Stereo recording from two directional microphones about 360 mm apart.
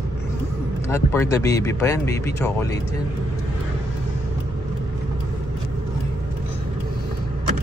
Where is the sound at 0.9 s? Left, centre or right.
Centre.